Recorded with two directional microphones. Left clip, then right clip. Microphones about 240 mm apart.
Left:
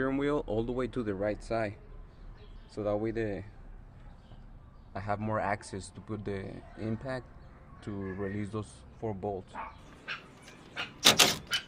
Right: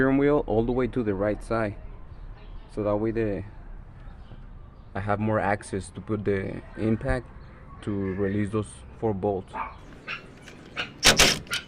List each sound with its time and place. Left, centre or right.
0.0 s speech: centre
2.7 s speech: centre
4.9 s speech: centre
11.0 s a sound: centre